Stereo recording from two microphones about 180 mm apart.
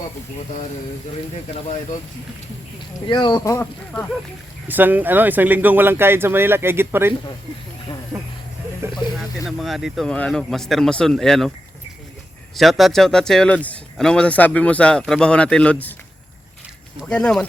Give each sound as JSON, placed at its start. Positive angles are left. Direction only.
{"t": 3.1, "sound": "speech", "side_deg": 25}
{"t": 3.4, "sound": "speech", "side_deg": 15}
{"t": 4.7, "sound": "speech", "side_deg": -10}
{"t": 8.1, "sound": "snake", "side_deg": -15}
{"t": 9.5, "sound": "speech", "side_deg": 0}
{"t": 12.5, "sound": "speech", "side_deg": 0}
{"t": 17.0, "sound": "speech", "side_deg": 5}